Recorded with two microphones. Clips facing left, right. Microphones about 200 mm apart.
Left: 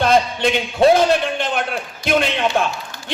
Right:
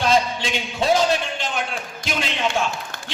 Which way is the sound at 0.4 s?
55° left (ahead or behind).